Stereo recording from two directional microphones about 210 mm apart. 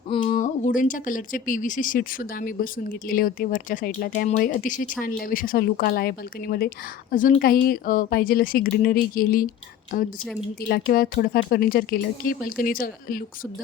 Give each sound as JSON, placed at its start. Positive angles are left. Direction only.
{"t": 0.1, "sound": "speech", "side_deg": 25}